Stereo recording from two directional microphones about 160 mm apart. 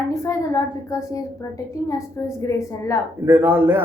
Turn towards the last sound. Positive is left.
turn(degrees=-15)  # may be behind; listen again after turning